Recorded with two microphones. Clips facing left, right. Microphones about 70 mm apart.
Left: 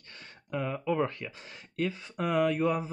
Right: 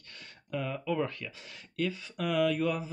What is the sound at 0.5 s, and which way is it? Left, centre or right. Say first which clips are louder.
Speech: left 2 dB; left.